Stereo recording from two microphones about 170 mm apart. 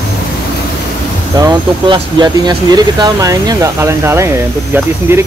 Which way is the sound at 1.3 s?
25° right (ahead or behind).